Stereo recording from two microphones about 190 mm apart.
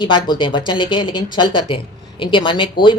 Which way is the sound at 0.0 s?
25° left (ahead or behind).